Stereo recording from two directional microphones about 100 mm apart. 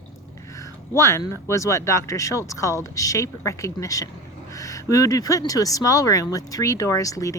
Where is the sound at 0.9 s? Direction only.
30° left (ahead or behind).